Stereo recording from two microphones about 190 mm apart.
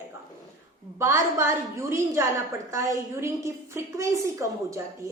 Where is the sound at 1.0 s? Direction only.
15° right (ahead or behind).